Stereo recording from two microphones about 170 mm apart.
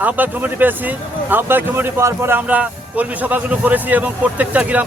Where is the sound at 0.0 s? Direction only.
10° right (ahead or behind).